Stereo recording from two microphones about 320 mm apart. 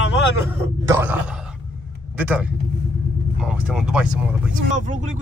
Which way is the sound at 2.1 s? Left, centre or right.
Centre.